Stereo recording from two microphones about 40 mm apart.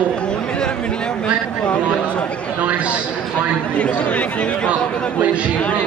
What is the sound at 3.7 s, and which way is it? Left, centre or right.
Speech, left.